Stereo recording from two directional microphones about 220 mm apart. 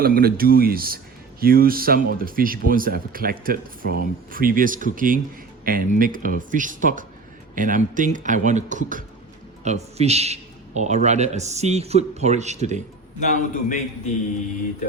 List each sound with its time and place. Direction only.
0.0 s speech: 45° right (ahead or behind)
13.1 s a man's voice: 35° left (ahead or behind)